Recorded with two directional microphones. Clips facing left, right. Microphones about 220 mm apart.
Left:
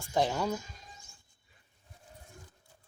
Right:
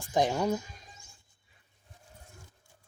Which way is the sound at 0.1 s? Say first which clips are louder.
Right 2 dB; 15° right (ahead or behind).